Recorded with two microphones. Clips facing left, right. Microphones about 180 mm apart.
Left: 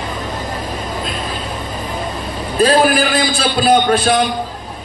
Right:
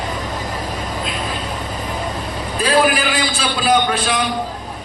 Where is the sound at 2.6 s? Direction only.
45° left (ahead or behind).